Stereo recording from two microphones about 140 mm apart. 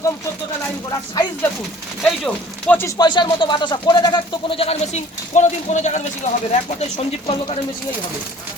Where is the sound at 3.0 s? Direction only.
35° left (ahead or behind).